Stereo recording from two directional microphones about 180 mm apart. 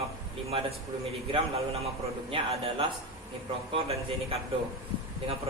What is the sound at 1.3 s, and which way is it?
A man's voice, 35° right (ahead or behind).